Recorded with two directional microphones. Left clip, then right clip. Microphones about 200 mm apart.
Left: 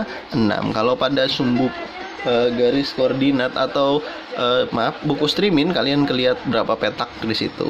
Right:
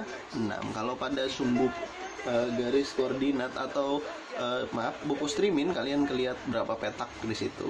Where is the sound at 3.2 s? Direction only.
50° left (ahead or behind).